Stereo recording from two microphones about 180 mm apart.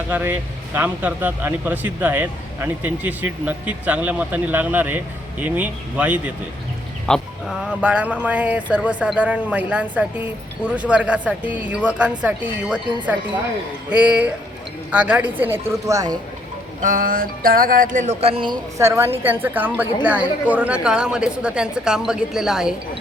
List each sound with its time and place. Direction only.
0.1 s speech: 10° right (ahead or behind)
16.8 s music: 50° right (ahead or behind); by 20.2 s 10° right (ahead or behind)
20.5 s a woman's voice: 5° right (ahead or behind)